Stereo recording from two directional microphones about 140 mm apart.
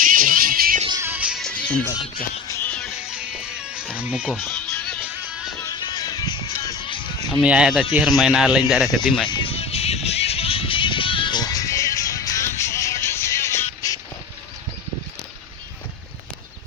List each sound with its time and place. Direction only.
0.0 s music: 80° right
1.0 s music: 10° right (ahead or behind)
1.4 s music: 5° left (ahead or behind)
3.1 s music: 5° right (ahead or behind)
5.5 s music: 25° left (ahead or behind)
7.4 s speech: 5° right (ahead or behind)
9.3 s music: 40° left (ahead or behind); by 14.0 s 20° left (ahead or behind)